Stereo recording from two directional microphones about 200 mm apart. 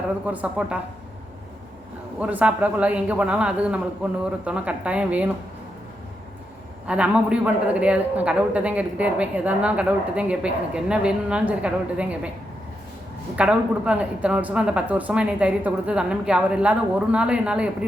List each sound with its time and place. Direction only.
0.3 s a man's voice: 5° right (ahead or behind)
2.1 s a man's voice: 5° right (ahead or behind)
6.8 s a man's voice: 5° right (ahead or behind)
13.3 s a man's voice: 5° right (ahead or behind)